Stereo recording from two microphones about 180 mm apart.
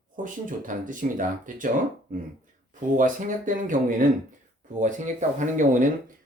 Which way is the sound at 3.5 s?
45° right (ahead or behind).